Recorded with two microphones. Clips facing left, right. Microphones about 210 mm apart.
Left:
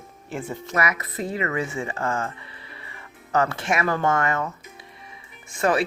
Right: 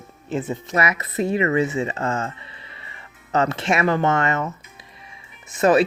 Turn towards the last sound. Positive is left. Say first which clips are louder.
# right 6 dB
turn(degrees=-20)  # may be behind; listen again after turning